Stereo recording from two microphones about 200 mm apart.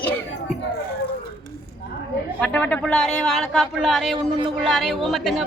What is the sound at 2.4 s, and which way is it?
A woman's voice, 5° left (ahead or behind).